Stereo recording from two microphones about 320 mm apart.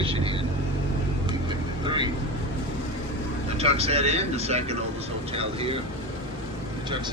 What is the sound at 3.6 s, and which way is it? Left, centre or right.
Speech, centre.